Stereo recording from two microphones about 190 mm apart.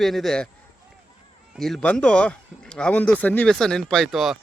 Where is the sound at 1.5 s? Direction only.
Centre (ahead or behind).